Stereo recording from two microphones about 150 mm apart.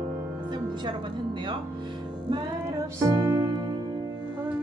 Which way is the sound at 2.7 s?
20° right (ahead or behind).